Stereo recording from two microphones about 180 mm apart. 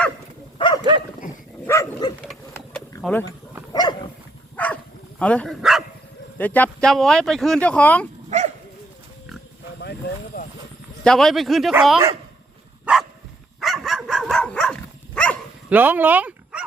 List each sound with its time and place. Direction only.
1.6 s dog: 15° left (ahead or behind)
2.5 s a sound: 15° left (ahead or behind)
3.0 s speech: 10° left (ahead or behind)
3.7 s dog: 25° left (ahead or behind)
4.5 s dog: 10° left (ahead or behind)
5.2 s speech: 5° left (ahead or behind)
8.3 s dog: 40° right (ahead or behind)
10.3 s a sound: 55° left (ahead or behind)
11.0 s speech: centre (ahead or behind)
12.8 s dog: centre (ahead or behind)
15.7 s speech: 10° right (ahead or behind)